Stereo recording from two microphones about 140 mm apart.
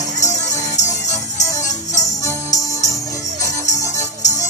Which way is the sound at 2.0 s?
25° left (ahead or behind).